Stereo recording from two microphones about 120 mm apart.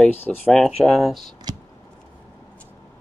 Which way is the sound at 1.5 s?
35° right (ahead or behind).